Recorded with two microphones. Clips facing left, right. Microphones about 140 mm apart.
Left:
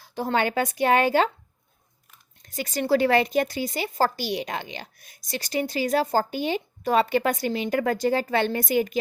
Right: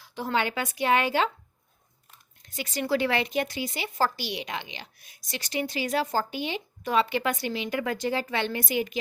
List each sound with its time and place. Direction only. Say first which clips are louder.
0.0 s speech: left 3 dB; 40° left (ahead or behind)
2.6 s speech: left 5 dB; 45° left (ahead or behind)